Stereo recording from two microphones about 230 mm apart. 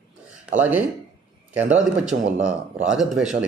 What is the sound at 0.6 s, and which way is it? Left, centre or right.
A man's voice, centre.